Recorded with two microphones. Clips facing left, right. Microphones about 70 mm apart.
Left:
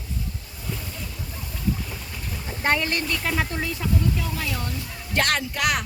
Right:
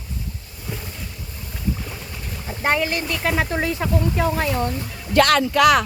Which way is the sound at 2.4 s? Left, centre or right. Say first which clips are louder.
Right 3 dB; centre.